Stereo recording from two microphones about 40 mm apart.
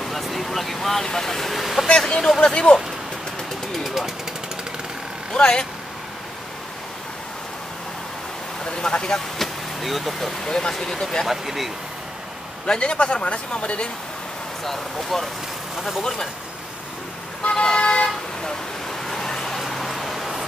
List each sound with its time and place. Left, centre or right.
0.0 s a sound: centre
1.9 s speech: centre
3.7 s jackhammer: centre
5.3 s speech: left
8.6 s speech: left
9.4 s vehicle: centre
10.4 s speech: centre
11.2 s speech: centre
12.6 s speech: left
14.6 s speech: centre
17.4 s toot: left; by 20.4 s centre